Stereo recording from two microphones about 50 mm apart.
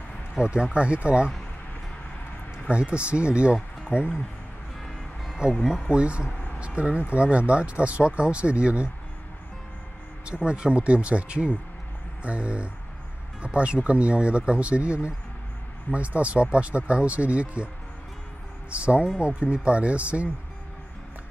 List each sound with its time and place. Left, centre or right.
0.4 s speech: centre
2.7 s speech: right
3.9 s speech: left
4.8 s music: centre
5.9 s speech: right
10.2 s speech: right
18.7 s speech: right